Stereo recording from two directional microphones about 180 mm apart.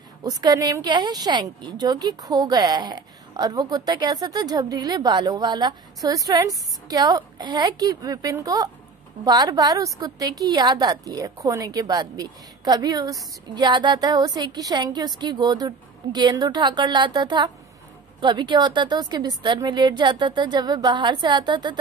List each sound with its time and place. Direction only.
0.2 s a woman's voice: 20° right (ahead or behind)